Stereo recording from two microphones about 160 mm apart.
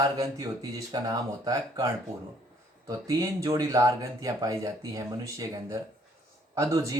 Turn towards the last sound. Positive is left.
turn(degrees=-20)  # may be behind; listen again after turning